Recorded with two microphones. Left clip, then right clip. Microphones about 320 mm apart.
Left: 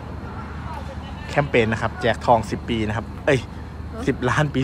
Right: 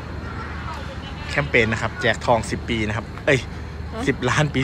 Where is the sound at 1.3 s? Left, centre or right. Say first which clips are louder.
Even; centre.